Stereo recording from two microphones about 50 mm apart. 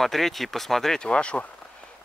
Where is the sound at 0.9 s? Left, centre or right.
Left.